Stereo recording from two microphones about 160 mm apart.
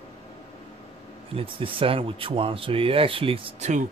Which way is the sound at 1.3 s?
35° right (ahead or behind).